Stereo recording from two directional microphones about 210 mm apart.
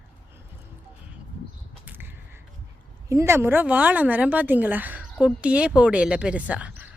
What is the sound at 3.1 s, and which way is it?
Speech, 15° right (ahead or behind).